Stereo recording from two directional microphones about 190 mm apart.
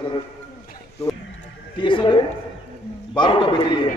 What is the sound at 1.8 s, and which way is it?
A man's voice, 25° left (ahead or behind).